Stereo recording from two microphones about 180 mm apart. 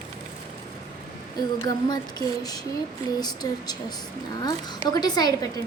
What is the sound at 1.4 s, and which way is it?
Speech, 20° left (ahead or behind).